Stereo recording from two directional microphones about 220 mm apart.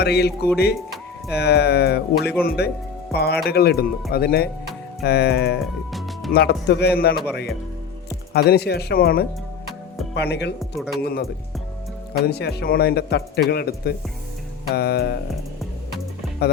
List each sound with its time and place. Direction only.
0.0 s a man's voice: 50° left (ahead or behind)
8.3 s a man's voice: 45° left (ahead or behind)
10.6 s speech: centre (ahead or behind)
11.0 s a man's voice: 45° left (ahead or behind)